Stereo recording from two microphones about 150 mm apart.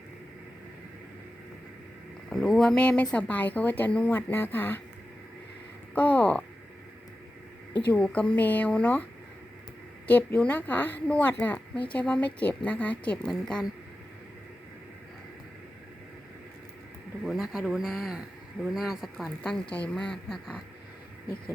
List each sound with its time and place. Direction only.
2.3 s a woman's voice: centre (ahead or behind)
5.9 s a woman's voice: 10° left (ahead or behind)
7.9 s a woman's voice: 5° left (ahead or behind)
10.1 s a woman's voice: 10° left (ahead or behind)
17.2 s speech: centre (ahead or behind)